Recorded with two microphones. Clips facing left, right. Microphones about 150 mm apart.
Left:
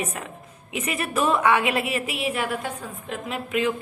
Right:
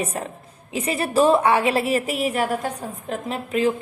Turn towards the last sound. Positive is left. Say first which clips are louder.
# right 3 dB
turn(degrees=-35)  # may be behind; listen again after turning